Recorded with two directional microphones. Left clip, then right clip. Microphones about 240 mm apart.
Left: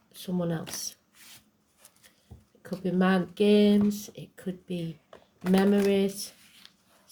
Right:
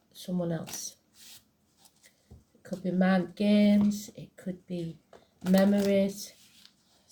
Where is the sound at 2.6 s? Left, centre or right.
Left.